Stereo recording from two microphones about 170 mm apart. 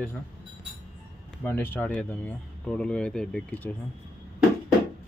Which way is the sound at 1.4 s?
10° left (ahead or behind).